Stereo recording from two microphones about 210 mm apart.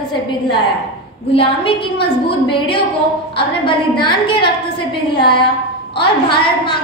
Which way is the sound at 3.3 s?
25° left (ahead or behind).